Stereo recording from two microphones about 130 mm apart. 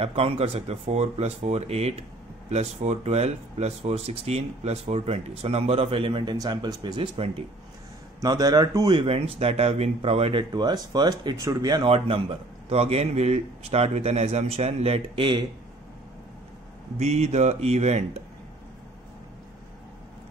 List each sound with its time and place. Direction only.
0.0 s speech: 50° right (ahead or behind)
8.2 s speech: 30° right (ahead or behind); by 10.4 s 50° right (ahead or behind)
10.5 s speech: 30° right (ahead or behind)
11.9 s speech: 50° right (ahead or behind)
17.0 s speech: 55° right (ahead or behind)